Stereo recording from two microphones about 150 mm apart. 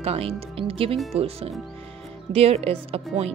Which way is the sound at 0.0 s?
40° right (ahead or behind).